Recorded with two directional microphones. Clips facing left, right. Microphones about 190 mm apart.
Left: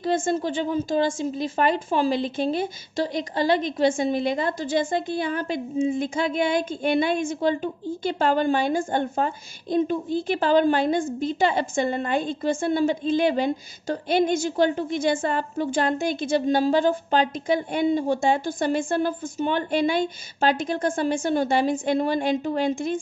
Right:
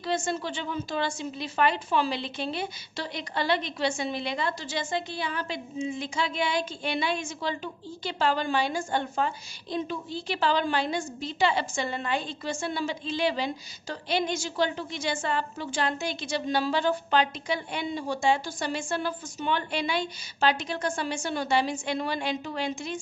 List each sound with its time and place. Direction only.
0.0 s a woman's voice: 50° left (ahead or behind)